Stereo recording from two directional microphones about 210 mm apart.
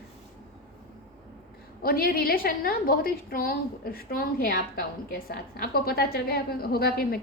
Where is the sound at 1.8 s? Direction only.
45° left (ahead or behind).